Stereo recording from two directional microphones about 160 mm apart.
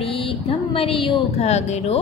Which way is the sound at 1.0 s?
40° left (ahead or behind).